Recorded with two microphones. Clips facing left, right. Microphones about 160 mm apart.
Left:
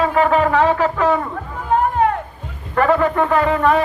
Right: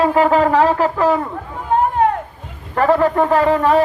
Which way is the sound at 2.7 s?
35° right (ahead or behind).